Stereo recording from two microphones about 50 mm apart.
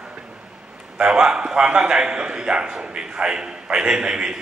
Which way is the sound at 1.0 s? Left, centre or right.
Centre.